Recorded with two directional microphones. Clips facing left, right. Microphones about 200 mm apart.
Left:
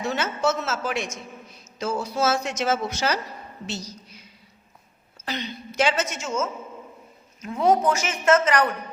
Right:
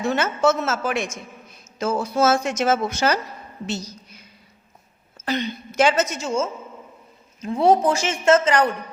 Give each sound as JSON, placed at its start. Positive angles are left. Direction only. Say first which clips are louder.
{"t": 0.0, "sound": "a woman's voice", "louder": "right 5 dB", "side_deg": -50}